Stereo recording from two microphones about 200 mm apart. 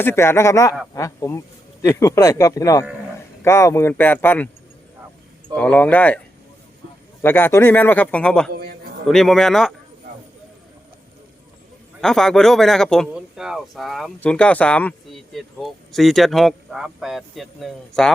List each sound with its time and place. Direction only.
0.0 s speech: 10° left (ahead or behind)
5.5 s speech: 5° left (ahead or behind)
7.2 s speech: 10° left (ahead or behind)
8.5 s a sound: 50° right (ahead or behind)
9.0 s speech: centre (ahead or behind)
11.9 s speech: centre (ahead or behind)